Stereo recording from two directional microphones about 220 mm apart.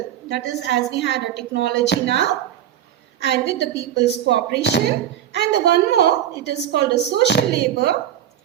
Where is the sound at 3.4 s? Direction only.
50° left (ahead or behind).